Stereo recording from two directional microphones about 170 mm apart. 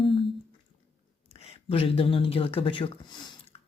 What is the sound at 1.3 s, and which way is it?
Speech, 35° left (ahead or behind).